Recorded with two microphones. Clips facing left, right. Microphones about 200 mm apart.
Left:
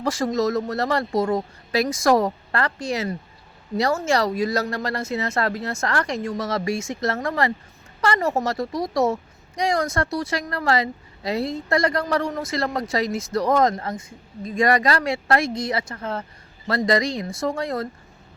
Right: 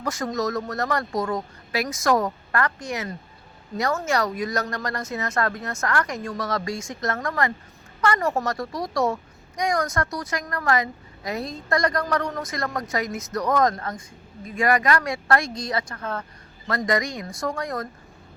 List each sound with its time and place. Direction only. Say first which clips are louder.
0.0 s speech: left 4 dB; 30° left (ahead or behind)